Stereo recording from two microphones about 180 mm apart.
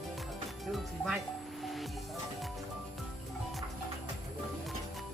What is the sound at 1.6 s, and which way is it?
Music, centre (ahead or behind).